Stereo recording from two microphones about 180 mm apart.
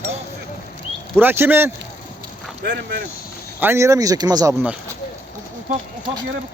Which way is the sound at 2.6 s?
70° right (ahead or behind).